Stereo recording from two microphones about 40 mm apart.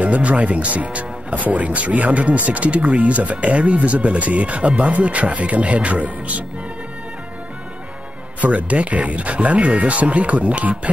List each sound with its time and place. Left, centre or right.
0.0 s speech: right
8.4 s speech: right